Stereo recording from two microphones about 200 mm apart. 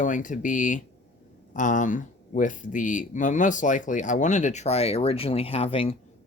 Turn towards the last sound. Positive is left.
turn(degrees=30)  # may be behind; listen again after turning